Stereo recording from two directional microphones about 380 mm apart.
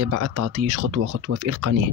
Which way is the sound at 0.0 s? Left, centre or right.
Right.